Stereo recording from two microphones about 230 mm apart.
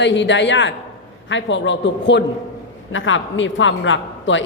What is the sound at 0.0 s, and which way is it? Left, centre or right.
A man's voice, left.